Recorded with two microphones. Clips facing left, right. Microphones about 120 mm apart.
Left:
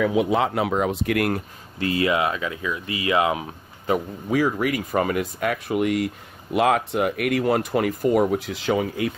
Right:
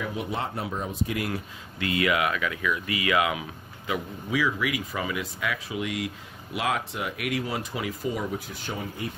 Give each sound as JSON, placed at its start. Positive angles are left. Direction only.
{"t": 0.0, "sound": "speech", "side_deg": 90}
{"t": 1.8, "sound": "speech", "side_deg": 30}